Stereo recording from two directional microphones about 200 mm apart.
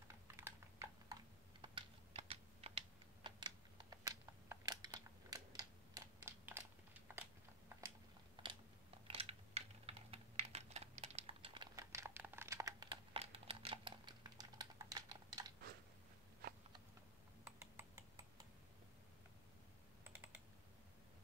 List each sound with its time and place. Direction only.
0.1 s typing: 15° right (ahead or behind)
1.6 s typing: 25° right (ahead or behind)
3.3 s a sound: 25° right (ahead or behind)
9.0 s typing: 30° right (ahead or behind)
17.5 s typing: 10° right (ahead or behind)